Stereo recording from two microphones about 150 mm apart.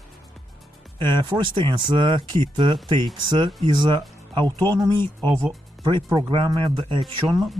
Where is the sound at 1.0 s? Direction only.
30° right (ahead or behind).